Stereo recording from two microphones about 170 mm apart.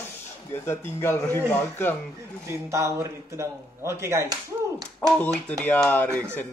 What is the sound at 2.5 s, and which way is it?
A man's voice, 15° right (ahead or behind).